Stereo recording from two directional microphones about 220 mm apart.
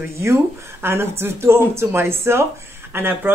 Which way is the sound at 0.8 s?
10° right (ahead or behind).